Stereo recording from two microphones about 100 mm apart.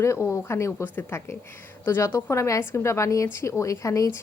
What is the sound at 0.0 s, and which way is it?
A woman's voice, 30° left (ahead or behind).